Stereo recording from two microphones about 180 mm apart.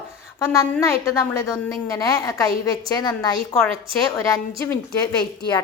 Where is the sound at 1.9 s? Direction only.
20° left (ahead or behind).